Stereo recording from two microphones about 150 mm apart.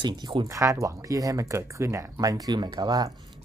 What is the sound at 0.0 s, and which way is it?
Speech, 30° right (ahead or behind).